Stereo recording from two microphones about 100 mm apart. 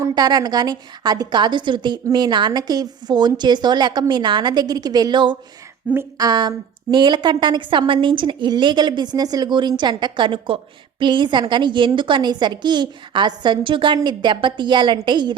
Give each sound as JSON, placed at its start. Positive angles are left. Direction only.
{"t": 0.1, "sound": "a woman's voice", "side_deg": -45}